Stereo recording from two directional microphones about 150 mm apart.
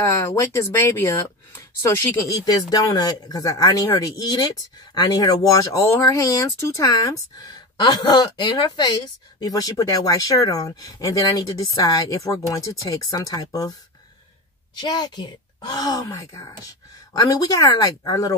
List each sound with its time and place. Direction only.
0.0 s a woman's voice: 20° left (ahead or behind)
14.8 s a woman's voice: 30° left (ahead or behind)